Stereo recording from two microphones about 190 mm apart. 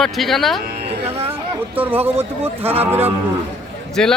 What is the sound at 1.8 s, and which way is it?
Speech, 10° right (ahead or behind).